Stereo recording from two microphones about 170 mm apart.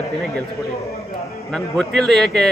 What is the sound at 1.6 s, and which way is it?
Speech, centre (ahead or behind).